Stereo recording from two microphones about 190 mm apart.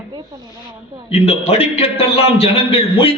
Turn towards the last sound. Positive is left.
turn(degrees=30)  # may be behind; listen again after turning